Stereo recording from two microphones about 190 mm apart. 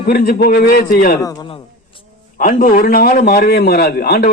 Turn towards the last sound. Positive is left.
turn(degrees=50)  # may be behind; listen again after turning